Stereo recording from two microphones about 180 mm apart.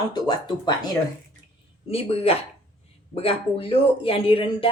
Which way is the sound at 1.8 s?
35° left (ahead or behind).